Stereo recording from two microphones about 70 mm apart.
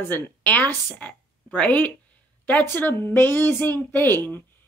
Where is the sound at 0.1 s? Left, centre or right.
Left.